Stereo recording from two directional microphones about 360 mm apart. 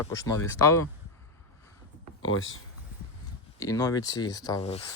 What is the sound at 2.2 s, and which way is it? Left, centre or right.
Speech, left.